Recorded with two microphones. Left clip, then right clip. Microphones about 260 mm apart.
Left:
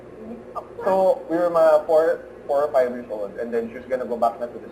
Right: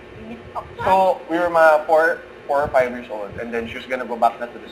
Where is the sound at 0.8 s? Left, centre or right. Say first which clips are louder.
Right 3 dB; centre.